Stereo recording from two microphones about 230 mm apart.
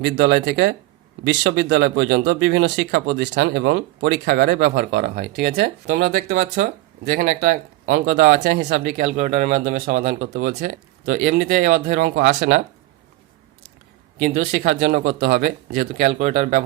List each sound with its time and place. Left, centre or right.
0.0 s speech: right
14.2 s speech: right